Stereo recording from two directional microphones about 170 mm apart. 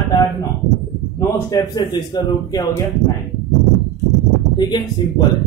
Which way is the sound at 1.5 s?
20° left (ahead or behind).